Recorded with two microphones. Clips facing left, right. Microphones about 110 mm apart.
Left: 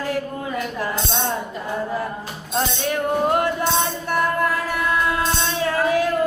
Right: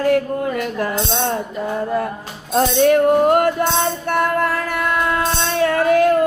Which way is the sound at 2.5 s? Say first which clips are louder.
Right 9 dB; 55° right (ahead or behind).